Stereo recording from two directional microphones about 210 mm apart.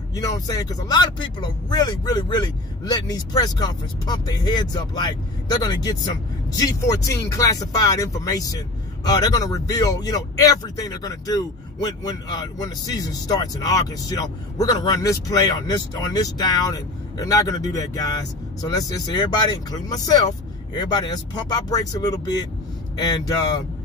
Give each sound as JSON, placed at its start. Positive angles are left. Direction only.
{"t": 0.1, "sound": "speech", "side_deg": 15}